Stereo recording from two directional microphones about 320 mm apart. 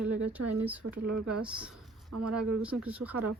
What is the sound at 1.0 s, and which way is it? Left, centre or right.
Speech, right.